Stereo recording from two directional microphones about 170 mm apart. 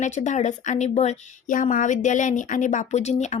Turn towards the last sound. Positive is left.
turn(degrees=40)  # may be behind; listen again after turning